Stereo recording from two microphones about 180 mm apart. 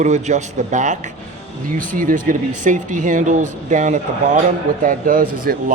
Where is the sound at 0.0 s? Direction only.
40° right (ahead or behind).